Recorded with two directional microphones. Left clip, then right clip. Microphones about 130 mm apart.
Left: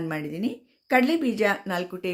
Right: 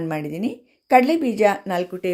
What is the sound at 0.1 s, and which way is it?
A woman's voice, 20° right (ahead or behind).